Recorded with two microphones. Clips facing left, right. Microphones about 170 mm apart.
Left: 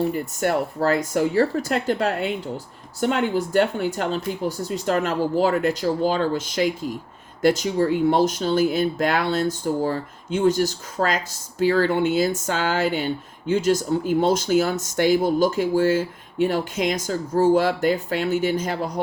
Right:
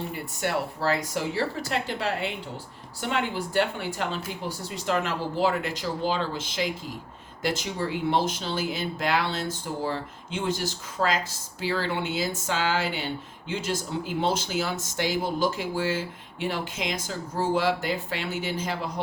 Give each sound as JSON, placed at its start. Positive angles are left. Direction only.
{"t": 0.1, "sound": "speech", "side_deg": 45}